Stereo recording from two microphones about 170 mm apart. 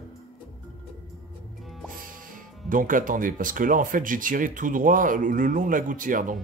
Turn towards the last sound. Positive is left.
turn(degrees=-50)  # may be behind; listen again after turning